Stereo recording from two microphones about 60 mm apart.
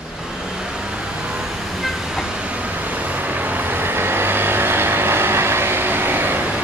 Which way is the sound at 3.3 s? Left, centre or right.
Right.